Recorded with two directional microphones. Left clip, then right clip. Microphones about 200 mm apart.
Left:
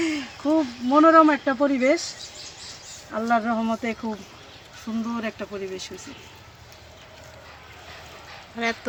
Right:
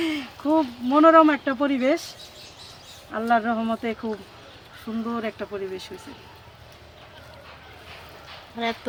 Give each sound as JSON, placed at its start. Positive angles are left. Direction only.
{"t": 0.0, "sound": "a sound", "side_deg": 20}
{"t": 1.0, "sound": "speech", "side_deg": 30}
{"t": 3.1, "sound": "speech", "side_deg": 40}
{"t": 5.0, "sound": "speech", "side_deg": 50}
{"t": 8.5, "sound": "speech", "side_deg": 10}